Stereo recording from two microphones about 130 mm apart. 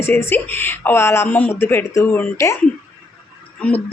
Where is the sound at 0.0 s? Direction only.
15° left (ahead or behind).